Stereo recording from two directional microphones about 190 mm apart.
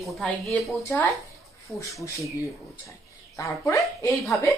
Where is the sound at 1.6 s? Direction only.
15° left (ahead or behind).